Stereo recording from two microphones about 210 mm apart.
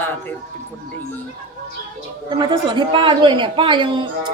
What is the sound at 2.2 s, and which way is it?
A woman's voice, 20° right (ahead or behind).